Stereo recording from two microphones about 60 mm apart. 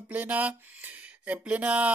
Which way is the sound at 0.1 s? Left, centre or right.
Right.